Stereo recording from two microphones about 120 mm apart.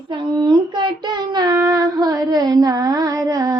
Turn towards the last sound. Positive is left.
turn(degrees=-30)  # may be behind; listen again after turning